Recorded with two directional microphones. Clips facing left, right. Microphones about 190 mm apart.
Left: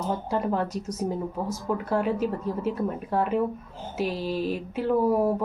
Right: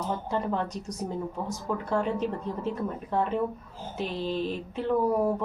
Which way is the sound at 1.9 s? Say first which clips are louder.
Left 2 dB; 5° left (ahead or behind).